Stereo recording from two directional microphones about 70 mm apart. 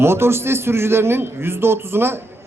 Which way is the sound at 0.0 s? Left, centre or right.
Right.